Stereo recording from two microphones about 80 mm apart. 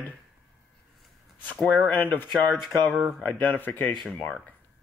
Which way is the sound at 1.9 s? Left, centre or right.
Left.